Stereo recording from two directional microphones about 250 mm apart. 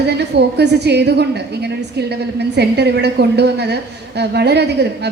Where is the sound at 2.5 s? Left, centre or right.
Right.